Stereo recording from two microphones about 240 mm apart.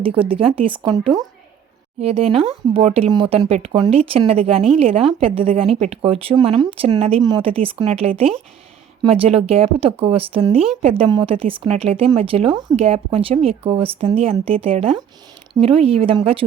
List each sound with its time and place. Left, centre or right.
0.0 s speech: right